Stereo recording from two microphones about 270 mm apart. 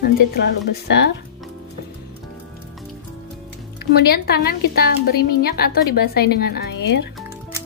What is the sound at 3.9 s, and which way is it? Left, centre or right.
Speech, left.